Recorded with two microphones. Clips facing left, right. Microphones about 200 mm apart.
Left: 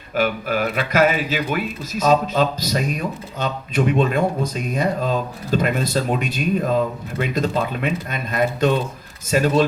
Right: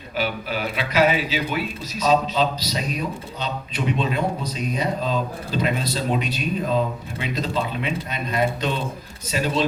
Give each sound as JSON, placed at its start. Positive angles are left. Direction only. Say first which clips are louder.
{"t": 0.2, "sound": "a man's voice", "louder": "left 5 dB", "side_deg": 50}